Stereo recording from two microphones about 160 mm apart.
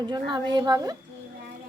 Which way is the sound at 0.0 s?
30° right (ahead or behind).